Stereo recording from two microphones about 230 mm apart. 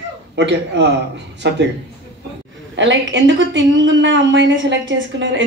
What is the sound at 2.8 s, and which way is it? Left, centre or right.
A woman's voice, right.